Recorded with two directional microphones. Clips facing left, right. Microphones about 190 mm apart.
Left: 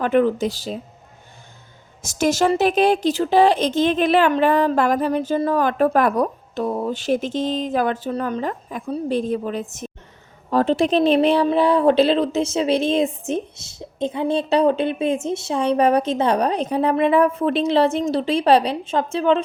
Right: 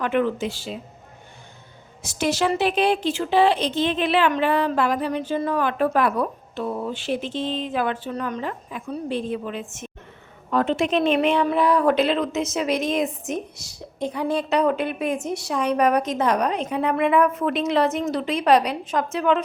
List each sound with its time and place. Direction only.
0.0 s speech: 40° left (ahead or behind)
2.0 s speech: 45° left (ahead or behind); by 19.4 s 30° left (ahead or behind)